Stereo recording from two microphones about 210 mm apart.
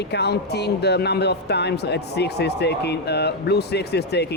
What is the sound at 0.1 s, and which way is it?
Speech, 50° left (ahead or behind).